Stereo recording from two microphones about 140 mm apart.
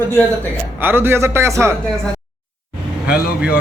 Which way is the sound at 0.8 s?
15° right (ahead or behind).